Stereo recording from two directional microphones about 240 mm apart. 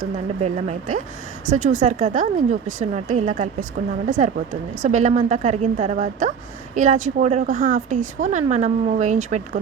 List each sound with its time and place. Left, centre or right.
0.4 s speech: right